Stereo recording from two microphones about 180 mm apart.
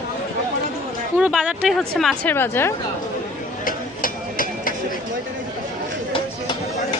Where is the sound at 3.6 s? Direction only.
50° left (ahead or behind).